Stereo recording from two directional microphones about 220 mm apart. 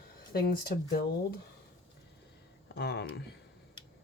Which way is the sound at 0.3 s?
45° left (ahead or behind).